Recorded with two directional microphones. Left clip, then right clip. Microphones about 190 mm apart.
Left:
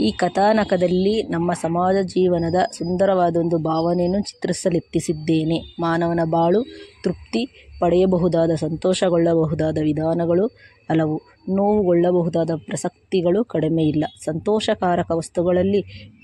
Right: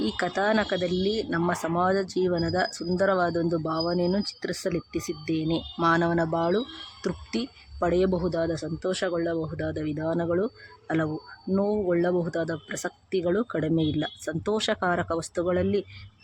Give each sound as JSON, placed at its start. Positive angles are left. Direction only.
{"t": 0.0, "sound": "speech", "side_deg": 20}